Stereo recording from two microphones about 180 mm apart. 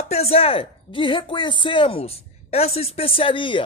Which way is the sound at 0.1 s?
35° left (ahead or behind).